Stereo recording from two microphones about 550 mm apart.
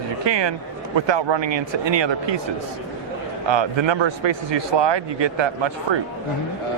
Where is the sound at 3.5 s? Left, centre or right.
Right.